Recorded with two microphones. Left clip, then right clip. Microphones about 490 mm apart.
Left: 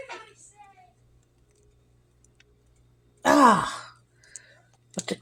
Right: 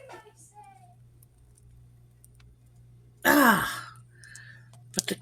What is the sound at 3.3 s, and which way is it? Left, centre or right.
Sigh, right.